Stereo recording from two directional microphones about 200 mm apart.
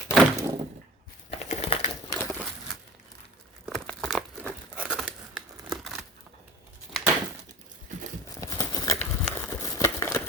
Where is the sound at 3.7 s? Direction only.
Centre (ahead or behind).